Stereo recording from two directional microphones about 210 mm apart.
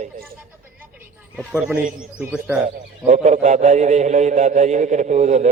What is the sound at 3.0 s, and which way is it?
A man's voice, 35° right (ahead or behind).